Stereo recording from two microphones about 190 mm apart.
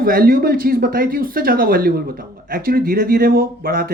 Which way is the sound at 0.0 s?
50° right (ahead or behind).